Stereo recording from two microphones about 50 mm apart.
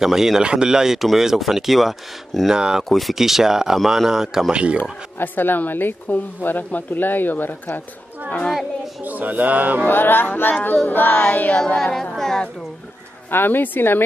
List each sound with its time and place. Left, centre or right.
0.0 s speech: centre
2.5 s speech: centre
2.8 s speech: centre
4.5 s speech: right
5.2 s speech: left
9.0 s speech: right
9.8 s a woman's voice: left
11.2 s child singing: left
11.8 s speech: centre
13.3 s a woman's voice: left